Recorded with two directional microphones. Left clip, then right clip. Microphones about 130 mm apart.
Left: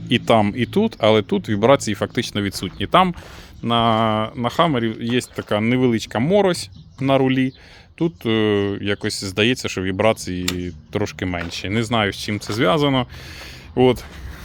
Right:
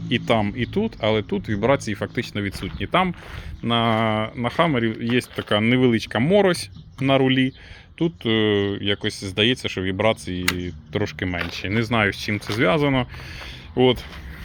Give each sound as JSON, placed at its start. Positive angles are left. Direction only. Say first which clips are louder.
{"t": 0.1, "sound": "speech", "louder": "left 5 dB", "side_deg": 50}
{"t": 3.6, "sound": "speech", "louder": "left 3 dB", "side_deg": 20}
{"t": 7.9, "sound": "speech", "louder": "left 1 dB", "side_deg": 25}